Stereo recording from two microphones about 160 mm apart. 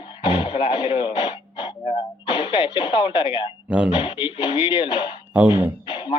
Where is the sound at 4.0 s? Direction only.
35° left (ahead or behind).